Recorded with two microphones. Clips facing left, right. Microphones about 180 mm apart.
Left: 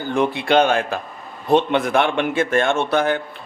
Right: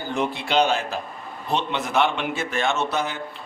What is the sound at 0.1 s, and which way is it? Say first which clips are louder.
A man's voice: left 6 dB; 55° left (ahead or behind).